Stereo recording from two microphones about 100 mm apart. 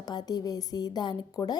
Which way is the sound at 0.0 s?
40° left (ahead or behind).